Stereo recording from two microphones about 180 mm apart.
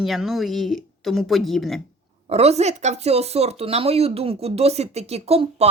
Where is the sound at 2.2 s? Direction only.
35° right (ahead or behind).